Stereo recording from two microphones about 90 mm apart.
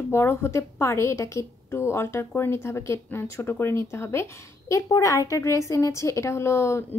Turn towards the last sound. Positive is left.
turn(degrees=30)  # may be behind; listen again after turning